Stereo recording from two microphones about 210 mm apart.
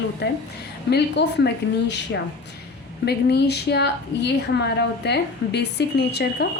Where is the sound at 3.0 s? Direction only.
50° left (ahead or behind).